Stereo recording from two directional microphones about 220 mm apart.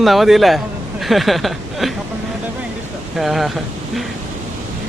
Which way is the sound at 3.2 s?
Centre (ahead or behind).